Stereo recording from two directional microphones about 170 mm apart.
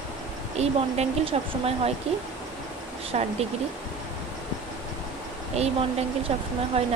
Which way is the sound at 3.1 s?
40° right (ahead or behind).